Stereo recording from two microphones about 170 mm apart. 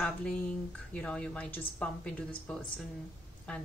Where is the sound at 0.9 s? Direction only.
5° left (ahead or behind).